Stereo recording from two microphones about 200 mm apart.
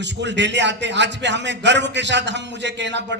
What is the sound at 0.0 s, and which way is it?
A man's voice, 60° right (ahead or behind).